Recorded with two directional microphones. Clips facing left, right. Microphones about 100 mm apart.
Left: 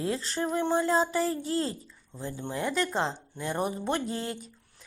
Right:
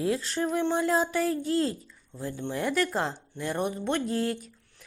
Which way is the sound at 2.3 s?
10° left (ahead or behind).